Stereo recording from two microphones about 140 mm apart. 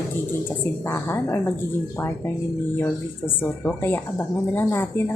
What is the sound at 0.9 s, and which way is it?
Speech, 20° left (ahead or behind).